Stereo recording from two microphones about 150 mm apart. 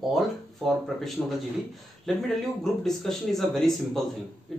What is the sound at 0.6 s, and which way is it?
Speech, centre (ahead or behind).